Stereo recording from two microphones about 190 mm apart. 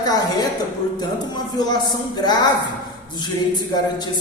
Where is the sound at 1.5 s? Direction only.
20° left (ahead or behind).